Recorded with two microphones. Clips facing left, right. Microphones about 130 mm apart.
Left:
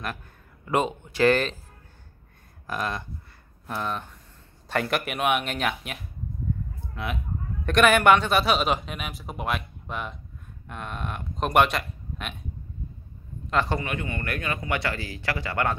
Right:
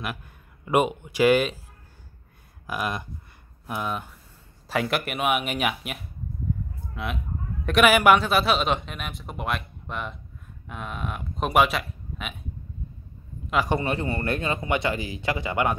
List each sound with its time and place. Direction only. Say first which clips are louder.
0.7 s speech: right 3 dB; 15° right (ahead or behind)
2.6 s a man's voice: right 1 dB; 10° right (ahead or behind)
13.5 s a man's voice: right 1 dB; 10° right (ahead or behind)
13.7 s a man's voice: right 4 dB; 30° right (ahead or behind); by 15.7 s 15° right (ahead or behind)